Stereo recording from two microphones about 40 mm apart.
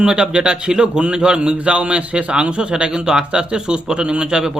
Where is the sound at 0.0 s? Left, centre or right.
Right.